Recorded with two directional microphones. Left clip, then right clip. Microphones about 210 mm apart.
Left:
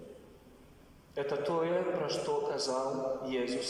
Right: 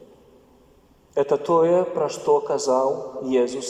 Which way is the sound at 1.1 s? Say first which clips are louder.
Right 13 dB; 50° right (ahead or behind).